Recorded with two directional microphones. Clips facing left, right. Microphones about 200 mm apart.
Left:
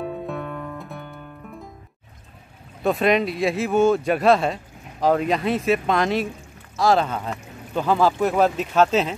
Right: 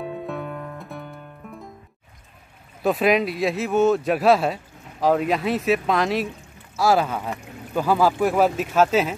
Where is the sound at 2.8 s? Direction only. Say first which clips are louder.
Even; 5° right (ahead or behind).